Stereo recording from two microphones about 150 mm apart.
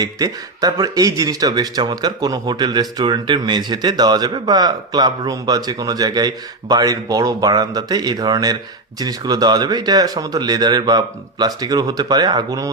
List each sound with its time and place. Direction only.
0.0 s speech: 25° right (ahead or behind)